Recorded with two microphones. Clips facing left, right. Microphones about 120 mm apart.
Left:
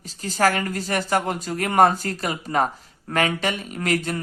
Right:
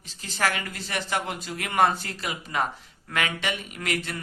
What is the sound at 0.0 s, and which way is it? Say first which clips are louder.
Speech: left 7 dB; 40° left (ahead or behind).